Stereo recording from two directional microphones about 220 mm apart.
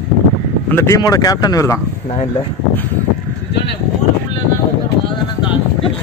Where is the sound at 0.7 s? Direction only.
10° left (ahead or behind).